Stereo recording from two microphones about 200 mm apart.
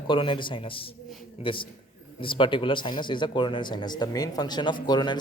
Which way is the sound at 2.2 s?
25° left (ahead or behind).